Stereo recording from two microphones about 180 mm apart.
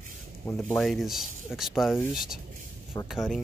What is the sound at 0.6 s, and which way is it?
Speech, 5° left (ahead or behind).